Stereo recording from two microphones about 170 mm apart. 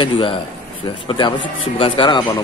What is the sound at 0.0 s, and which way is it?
A man's voice, 30° left (ahead or behind).